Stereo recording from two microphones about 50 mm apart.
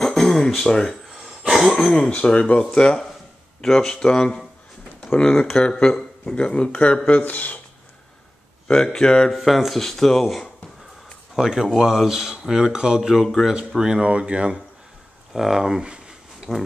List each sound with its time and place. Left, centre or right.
0.0 s a sound: centre
1.1 s a sound: centre
2.0 s speech: centre; by 7.6 s left
8.8 s speech: centre
9.3 s speech: centre
11.3 s speech: centre
13.1 s speech: centre
13.5 s speech: centre
15.3 s speech: centre